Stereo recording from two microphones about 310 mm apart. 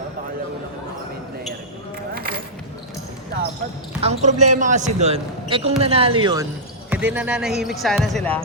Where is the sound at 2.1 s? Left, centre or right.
Right.